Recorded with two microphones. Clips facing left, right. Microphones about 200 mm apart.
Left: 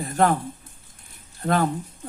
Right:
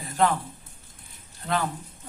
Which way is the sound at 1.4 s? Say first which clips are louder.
Left 6 dB; 50° left (ahead or behind).